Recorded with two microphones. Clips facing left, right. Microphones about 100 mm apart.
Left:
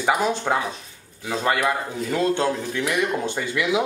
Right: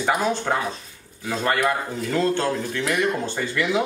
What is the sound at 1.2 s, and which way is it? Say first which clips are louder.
Speech: even; 5° left (ahead or behind).